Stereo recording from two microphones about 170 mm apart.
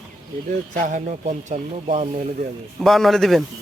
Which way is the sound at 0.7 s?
50° right (ahead or behind).